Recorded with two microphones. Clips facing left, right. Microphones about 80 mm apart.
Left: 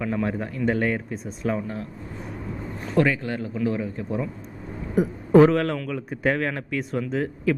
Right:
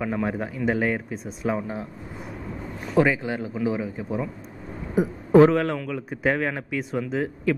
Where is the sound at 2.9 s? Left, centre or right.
Centre.